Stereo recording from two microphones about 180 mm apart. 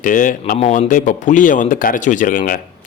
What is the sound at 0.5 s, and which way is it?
Speech, 35° left (ahead or behind).